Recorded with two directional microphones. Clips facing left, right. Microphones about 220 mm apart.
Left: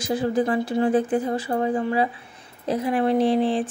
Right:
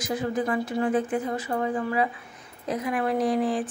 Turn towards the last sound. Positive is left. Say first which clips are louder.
# left 4 dB
turn(degrees=25)  # may be behind; listen again after turning